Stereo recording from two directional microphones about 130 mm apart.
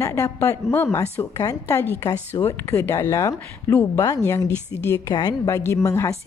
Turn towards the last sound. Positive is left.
turn(degrees=25)  # may be behind; listen again after turning